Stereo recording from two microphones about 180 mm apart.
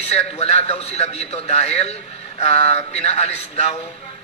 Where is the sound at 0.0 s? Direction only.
35° left (ahead or behind).